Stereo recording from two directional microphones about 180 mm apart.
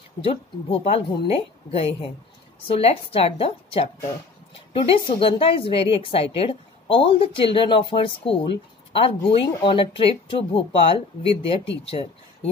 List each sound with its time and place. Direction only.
0.2 s a woman's voice: 30° left (ahead or behind)